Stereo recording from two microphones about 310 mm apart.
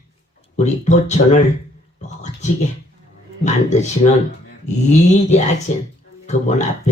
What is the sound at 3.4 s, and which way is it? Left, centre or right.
Speech, left.